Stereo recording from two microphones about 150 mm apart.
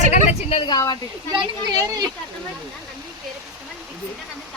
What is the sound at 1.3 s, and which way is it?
Speech, 25° right (ahead or behind).